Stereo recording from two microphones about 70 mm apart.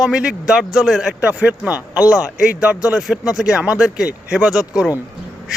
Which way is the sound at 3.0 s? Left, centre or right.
Centre.